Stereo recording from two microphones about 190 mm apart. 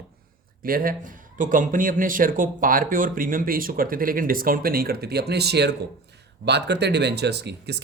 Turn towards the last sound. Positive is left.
turn(degrees=-60)  # may be behind; listen again after turning